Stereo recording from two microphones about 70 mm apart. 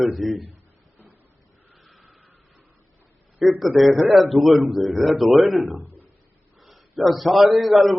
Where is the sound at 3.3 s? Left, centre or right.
Centre.